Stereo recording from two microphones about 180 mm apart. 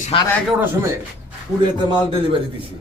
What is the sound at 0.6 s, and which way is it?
Speech, 15° right (ahead or behind).